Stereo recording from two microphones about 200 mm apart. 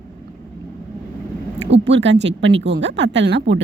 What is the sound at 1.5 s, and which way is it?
Speech, 60° right (ahead or behind).